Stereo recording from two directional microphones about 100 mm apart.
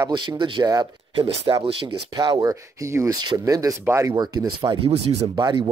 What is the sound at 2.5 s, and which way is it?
Speech, 30° right (ahead or behind).